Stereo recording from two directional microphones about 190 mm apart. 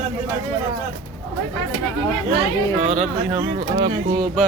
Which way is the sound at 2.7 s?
35° right (ahead or behind).